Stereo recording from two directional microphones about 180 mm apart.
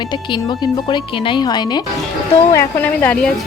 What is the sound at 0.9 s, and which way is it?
Speech, 25° left (ahead or behind).